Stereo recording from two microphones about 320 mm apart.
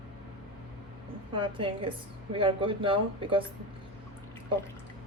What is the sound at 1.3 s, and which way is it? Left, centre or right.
Speech, centre.